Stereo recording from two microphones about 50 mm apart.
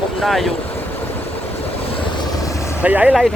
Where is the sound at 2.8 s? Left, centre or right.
Right.